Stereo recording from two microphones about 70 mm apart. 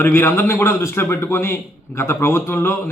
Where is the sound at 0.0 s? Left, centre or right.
Left.